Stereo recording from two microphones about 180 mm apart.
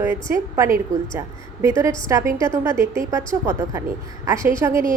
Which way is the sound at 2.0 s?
15° right (ahead or behind).